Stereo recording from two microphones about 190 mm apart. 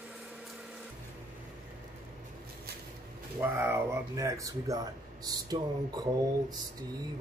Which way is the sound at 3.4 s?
10° right (ahead or behind).